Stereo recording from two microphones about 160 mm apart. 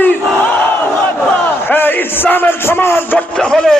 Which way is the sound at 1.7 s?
10° left (ahead or behind).